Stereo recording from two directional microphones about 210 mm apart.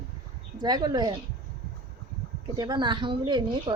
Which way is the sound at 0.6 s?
20° right (ahead or behind).